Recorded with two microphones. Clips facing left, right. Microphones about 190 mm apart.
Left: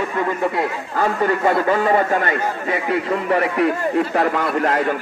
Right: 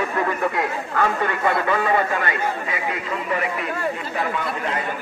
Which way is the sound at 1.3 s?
40° left (ahead or behind).